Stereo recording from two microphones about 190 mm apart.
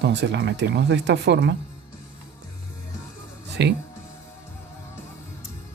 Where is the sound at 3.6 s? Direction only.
65° right (ahead or behind).